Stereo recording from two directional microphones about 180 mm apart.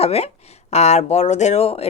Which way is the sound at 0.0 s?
35° left (ahead or behind).